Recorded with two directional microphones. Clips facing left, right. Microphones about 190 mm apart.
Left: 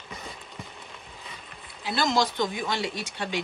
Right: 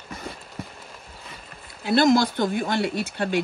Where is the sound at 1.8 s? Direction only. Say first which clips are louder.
Right 7 dB; 55° right (ahead or behind).